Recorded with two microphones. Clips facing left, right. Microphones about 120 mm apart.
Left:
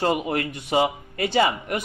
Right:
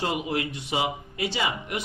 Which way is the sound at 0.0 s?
50° left (ahead or behind).